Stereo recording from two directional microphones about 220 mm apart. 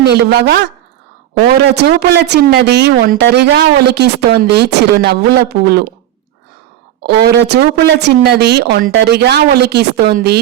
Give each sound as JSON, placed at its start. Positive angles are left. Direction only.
{"t": 0.0, "sound": "speech", "side_deg": -45}
{"t": 7.0, "sound": "speech", "side_deg": -50}